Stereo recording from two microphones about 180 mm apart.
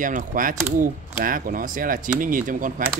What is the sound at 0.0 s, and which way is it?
Speech, 45° right (ahead or behind).